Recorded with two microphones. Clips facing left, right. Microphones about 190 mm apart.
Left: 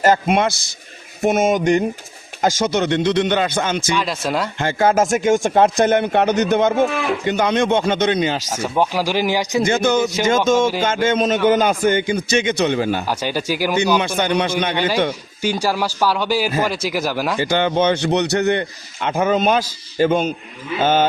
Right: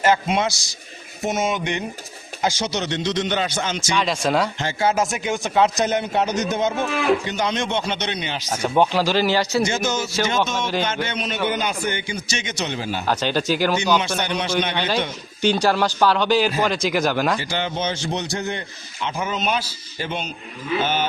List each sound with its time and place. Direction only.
0.0 s a man's voice: 50° left (ahead or behind)
3.9 s speech: centre (ahead or behind)
4.6 s a man's voice: 50° left (ahead or behind)
8.5 s speech: 5° left (ahead or behind)
9.6 s speech: 60° left (ahead or behind)
10.2 s a man's voice: 45° left (ahead or behind)
13.1 s speech: 10° left (ahead or behind)
14.0 s speech: 55° left (ahead or behind)
15.4 s speech: 10° left (ahead or behind)
17.5 s a man's voice: 60° left (ahead or behind)
19.0 s a man's voice: 55° left (ahead or behind)